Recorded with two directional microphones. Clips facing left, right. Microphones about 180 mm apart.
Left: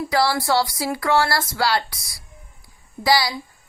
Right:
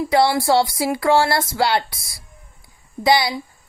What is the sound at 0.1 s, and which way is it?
Speech, 25° right (ahead or behind).